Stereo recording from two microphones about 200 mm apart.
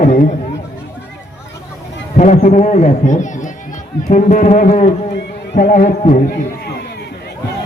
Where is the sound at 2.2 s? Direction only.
35° left (ahead or behind).